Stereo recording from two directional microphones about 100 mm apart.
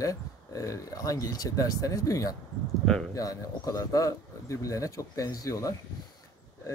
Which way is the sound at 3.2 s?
35° left (ahead or behind).